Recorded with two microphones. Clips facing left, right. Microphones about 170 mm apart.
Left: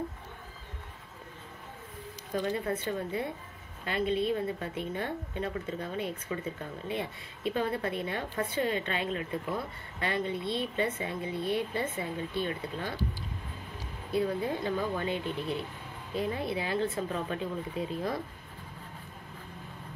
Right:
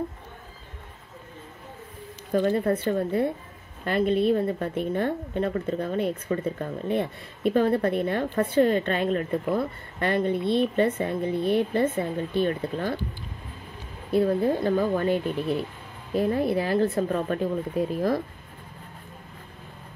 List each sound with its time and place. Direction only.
2.3 s a woman's voice: 50° right (ahead or behind)
14.1 s speech: 50° right (ahead or behind)
16.2 s speech: 55° right (ahead or behind)